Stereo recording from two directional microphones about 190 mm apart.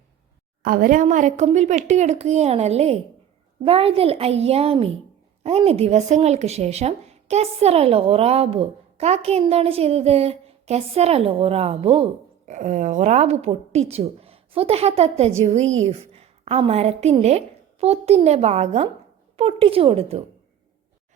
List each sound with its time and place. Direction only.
0.6 s a woman's voice: 50° right (ahead or behind); by 20.2 s 30° right (ahead or behind)